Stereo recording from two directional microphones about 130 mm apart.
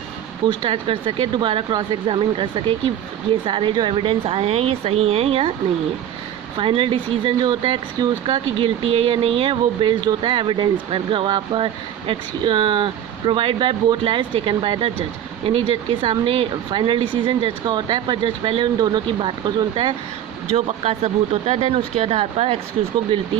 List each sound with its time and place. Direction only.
0.4 s a woman's voice: 40° right (ahead or behind)
6.6 s speech: 45° right (ahead or behind)
8.5 s speech: 45° right (ahead or behind)
20.5 s a woman's voice: 50° right (ahead or behind)